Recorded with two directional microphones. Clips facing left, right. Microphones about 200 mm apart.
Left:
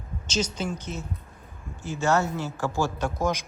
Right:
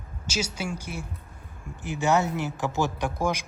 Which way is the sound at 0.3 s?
10° right (ahead or behind).